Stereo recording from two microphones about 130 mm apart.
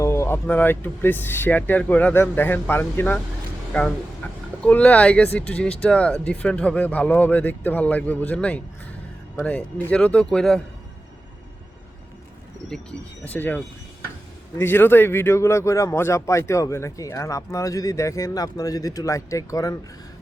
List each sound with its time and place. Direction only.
0.0 s speech: 20° left (ahead or behind); by 10.6 s 5° left (ahead or behind)
12.6 s speech: 5° left (ahead or behind)
14.6 s a man's voice: 15° left (ahead or behind)